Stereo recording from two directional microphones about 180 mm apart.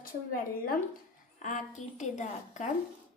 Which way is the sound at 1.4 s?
40° left (ahead or behind).